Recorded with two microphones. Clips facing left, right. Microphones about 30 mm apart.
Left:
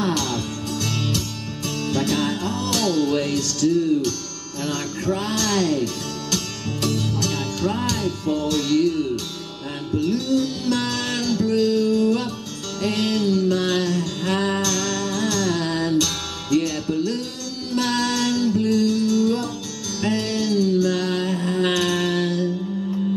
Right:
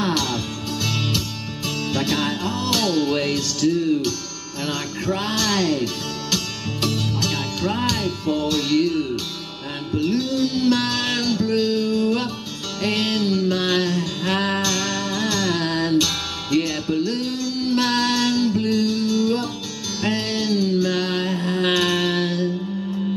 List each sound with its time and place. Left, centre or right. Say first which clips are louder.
0.0 s music: right 1 dB; centre
20.0 s mantra: even; right